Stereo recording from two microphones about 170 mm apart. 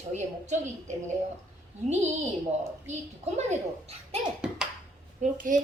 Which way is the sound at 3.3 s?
40° right (ahead or behind).